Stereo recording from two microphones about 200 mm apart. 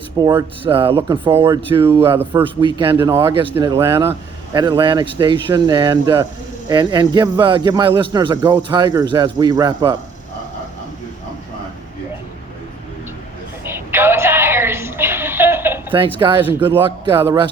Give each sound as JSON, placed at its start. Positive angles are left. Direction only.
{"t": 0.2, "sound": "a man's voice", "side_deg": -20}
{"t": 1.3, "sound": "speech", "side_deg": -10}
{"t": 1.6, "sound": "a man's voice", "side_deg": -25}
{"t": 2.0, "sound": "speech", "side_deg": -10}
{"t": 2.4, "sound": "a man's voice", "side_deg": -25}
{"t": 13.7, "sound": "a sound", "side_deg": -10}
{"t": 16.1, "sound": "a man's voice", "side_deg": -25}
{"t": 16.4, "sound": "speech", "side_deg": -10}
{"t": 16.8, "sound": "a man's voice", "side_deg": -25}